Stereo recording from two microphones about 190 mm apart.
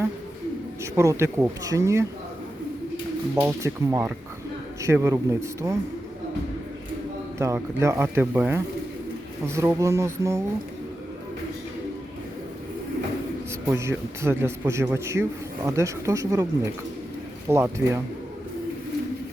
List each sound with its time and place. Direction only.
0.9 s a man's voice: 15° right (ahead or behind)
3.3 s a man's voice: 15° right (ahead or behind)
7.3 s a man's voice: 15° right (ahead or behind)
13.7 s a man's voice: 15° right (ahead or behind)
17.5 s a man's voice: 15° right (ahead or behind)